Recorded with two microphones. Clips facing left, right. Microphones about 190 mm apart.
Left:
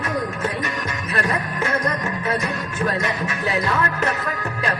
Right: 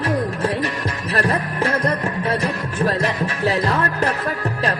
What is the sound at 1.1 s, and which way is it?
Music, 35° right (ahead or behind).